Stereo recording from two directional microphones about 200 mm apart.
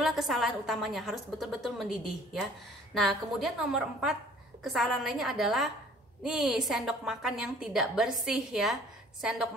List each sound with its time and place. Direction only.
0.0 s a woman's voice: centre (ahead or behind)